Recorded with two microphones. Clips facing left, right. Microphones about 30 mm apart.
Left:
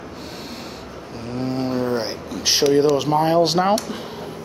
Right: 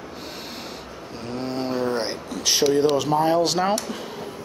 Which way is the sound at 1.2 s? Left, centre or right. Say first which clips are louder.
Left 3 dB; centre.